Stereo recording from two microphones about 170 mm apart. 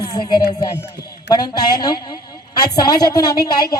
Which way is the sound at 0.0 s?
25° left (ahead or behind).